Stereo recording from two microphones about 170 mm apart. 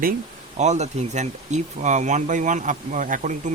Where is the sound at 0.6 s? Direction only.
40° right (ahead or behind).